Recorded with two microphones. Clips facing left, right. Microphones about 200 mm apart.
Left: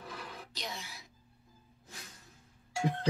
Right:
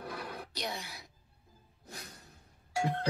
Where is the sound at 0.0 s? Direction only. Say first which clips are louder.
Right 4 dB; 60° right (ahead or behind).